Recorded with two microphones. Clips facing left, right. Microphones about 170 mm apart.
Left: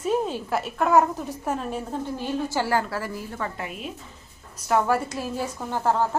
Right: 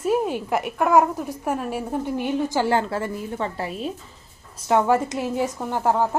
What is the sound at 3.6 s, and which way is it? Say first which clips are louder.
Speech: right 6 dB; 35° right (ahead or behind).